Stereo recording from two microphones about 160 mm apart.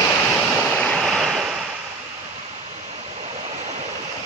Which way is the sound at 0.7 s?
5° left (ahead or behind).